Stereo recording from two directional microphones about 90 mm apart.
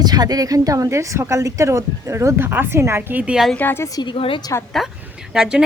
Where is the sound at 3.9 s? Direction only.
55° left (ahead or behind).